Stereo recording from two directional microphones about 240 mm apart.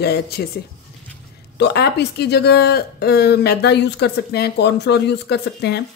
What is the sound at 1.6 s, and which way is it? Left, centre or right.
Speech, left.